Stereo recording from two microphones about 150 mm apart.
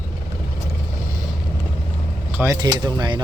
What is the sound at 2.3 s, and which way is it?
Speech, 20° right (ahead or behind).